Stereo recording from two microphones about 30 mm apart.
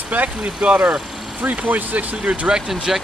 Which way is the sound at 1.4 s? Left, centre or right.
Right.